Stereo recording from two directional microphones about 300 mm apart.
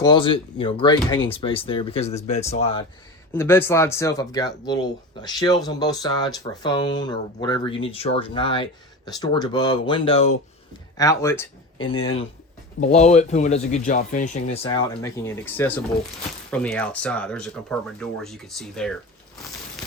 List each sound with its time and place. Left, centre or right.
0.0 s speech: centre
3.3 s speech: centre
12.8 s speech: left; by 18.9 s centre